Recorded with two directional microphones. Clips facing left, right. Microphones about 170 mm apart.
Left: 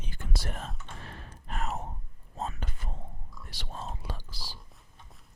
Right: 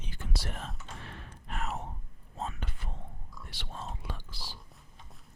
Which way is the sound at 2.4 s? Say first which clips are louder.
Left 2 dB; 40° left (ahead or behind).